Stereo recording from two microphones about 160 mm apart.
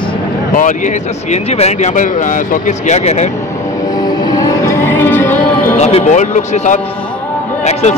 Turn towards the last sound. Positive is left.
turn(degrees=45)  # may be behind; listen again after turning